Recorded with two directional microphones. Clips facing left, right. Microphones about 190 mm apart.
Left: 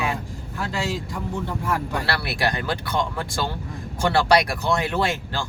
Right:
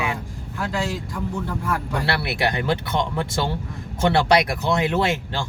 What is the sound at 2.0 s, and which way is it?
Speech, 20° right (ahead or behind).